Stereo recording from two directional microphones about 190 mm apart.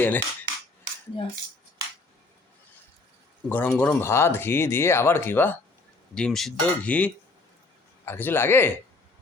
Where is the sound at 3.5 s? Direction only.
10° left (ahead or behind).